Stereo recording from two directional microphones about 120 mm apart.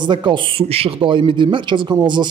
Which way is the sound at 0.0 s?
40° right (ahead or behind).